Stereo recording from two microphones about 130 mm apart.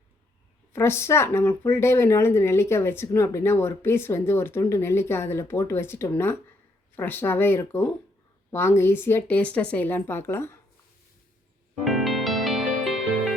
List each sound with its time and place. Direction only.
0.7 s speech: 20° left (ahead or behind)
11.9 s music: centre (ahead or behind)